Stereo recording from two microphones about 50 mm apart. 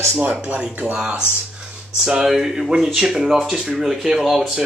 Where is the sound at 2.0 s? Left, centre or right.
Centre.